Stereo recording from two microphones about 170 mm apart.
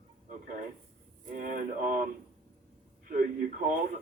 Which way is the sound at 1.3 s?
50° right (ahead or behind).